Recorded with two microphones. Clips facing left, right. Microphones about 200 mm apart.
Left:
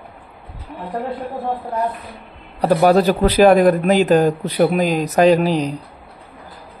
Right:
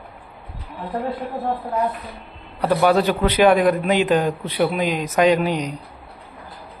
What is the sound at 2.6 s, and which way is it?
Speech, 35° left (ahead or behind).